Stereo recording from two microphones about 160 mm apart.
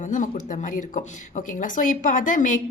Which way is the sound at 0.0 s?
55° left (ahead or behind).